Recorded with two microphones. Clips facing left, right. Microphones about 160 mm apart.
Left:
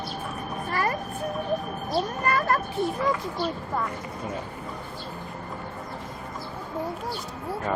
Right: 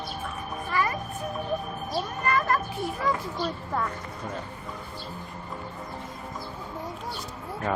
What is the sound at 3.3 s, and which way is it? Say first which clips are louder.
Speech: left 1 dB; 5° left (ahead or behind).